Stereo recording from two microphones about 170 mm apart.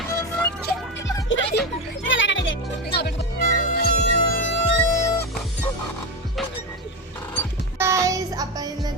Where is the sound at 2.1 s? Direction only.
90° left.